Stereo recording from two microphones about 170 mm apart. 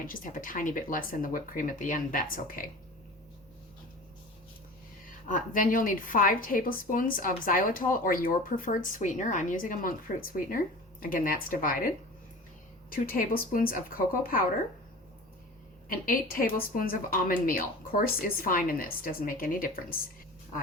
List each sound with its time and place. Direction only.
0.0 s speech: 50° left (ahead or behind)
5.0 s a woman's voice: 50° left (ahead or behind)
12.9 s a woman's voice: 55° left (ahead or behind)
15.9 s a woman's voice: 55° left (ahead or behind)